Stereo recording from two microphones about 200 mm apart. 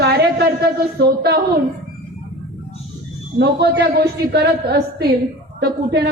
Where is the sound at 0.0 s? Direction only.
55° right (ahead or behind).